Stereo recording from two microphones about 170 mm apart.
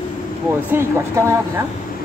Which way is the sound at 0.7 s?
15° right (ahead or behind).